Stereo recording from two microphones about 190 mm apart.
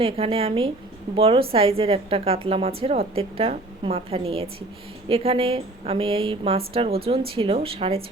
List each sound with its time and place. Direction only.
0.0 s a woman's voice: 30° right (ahead or behind)